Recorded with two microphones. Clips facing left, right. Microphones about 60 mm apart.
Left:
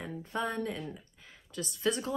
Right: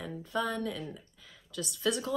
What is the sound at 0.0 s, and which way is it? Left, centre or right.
Speech, left.